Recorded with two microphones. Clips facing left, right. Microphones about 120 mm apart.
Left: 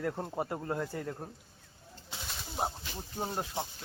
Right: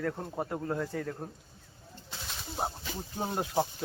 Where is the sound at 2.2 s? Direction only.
Centre (ahead or behind).